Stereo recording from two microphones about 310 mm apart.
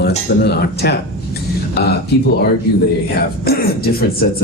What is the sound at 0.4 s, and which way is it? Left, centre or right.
Speech, left.